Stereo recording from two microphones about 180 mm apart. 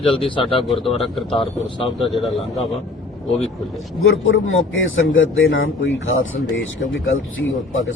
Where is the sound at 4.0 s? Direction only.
90° left.